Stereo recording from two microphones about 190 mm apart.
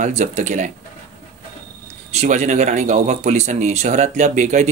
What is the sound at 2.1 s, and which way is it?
Speech, 35° right (ahead or behind).